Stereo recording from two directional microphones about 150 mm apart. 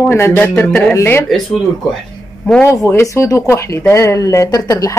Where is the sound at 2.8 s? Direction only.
20° left (ahead or behind).